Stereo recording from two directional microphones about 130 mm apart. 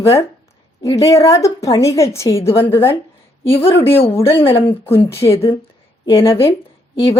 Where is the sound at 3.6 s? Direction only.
45° left (ahead or behind).